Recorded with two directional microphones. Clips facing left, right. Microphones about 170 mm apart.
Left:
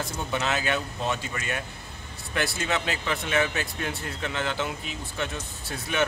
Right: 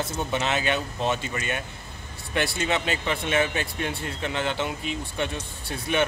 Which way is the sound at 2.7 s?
25° right (ahead or behind).